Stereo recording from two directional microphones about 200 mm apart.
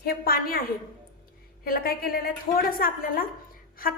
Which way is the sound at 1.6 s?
45° left (ahead or behind).